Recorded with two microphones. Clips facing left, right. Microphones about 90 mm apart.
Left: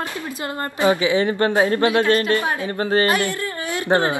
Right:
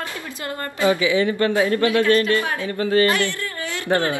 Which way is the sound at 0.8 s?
25° left (ahead or behind).